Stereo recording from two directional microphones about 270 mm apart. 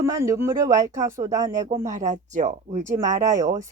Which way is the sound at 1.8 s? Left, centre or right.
Right.